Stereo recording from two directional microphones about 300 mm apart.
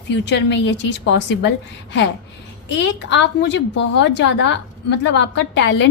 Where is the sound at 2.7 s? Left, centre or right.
Left.